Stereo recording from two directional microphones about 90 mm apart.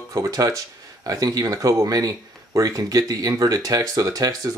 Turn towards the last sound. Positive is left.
turn(degrees=-45)  # may be behind; listen again after turning